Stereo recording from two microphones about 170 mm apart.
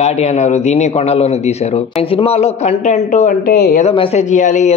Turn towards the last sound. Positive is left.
turn(degrees=45)  # may be behind; listen again after turning